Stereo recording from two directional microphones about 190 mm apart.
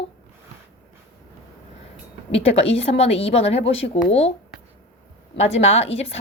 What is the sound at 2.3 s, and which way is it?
A woman's voice, 35° left (ahead or behind).